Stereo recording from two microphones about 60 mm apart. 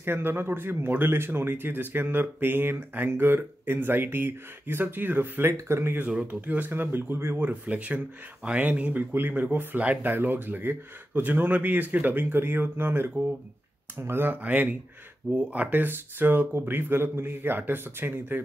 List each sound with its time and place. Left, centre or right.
0.0 s speech: right
5.5 s speech: right
6.0 s speech: centre
6.4 s speech: right
14.4 s speech: right